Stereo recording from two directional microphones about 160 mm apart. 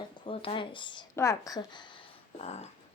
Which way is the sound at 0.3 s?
35° left (ahead or behind).